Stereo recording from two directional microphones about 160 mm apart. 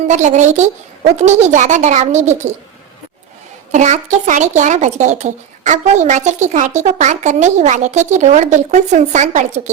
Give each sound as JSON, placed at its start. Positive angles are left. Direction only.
{"t": 0.1, "sound": "a woman's voice", "side_deg": -50}
{"t": 3.7, "sound": "a woman's voice", "side_deg": -45}